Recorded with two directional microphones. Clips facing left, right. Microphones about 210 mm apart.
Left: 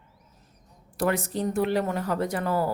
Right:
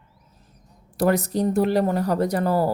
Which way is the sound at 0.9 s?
40° right (ahead or behind).